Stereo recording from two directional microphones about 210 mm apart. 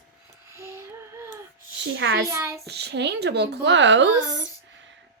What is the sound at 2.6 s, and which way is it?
Speech, 55° right (ahead or behind).